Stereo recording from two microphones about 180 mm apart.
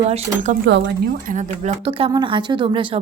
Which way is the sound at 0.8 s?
50° right (ahead or behind).